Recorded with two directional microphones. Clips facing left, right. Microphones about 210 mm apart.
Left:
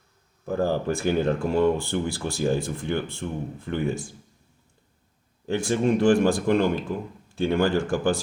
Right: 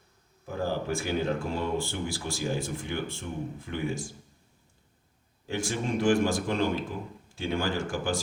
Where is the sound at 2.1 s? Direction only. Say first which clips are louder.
Left 7 dB; 60° left (ahead or behind).